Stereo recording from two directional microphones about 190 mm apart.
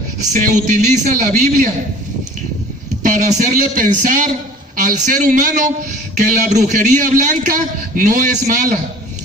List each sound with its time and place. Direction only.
0.3 s a man's voice: 45° right (ahead or behind)
3.0 s a man's voice: 40° right (ahead or behind)